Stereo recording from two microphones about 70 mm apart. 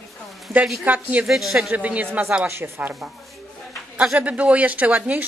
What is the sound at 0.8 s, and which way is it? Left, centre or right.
Speech, right.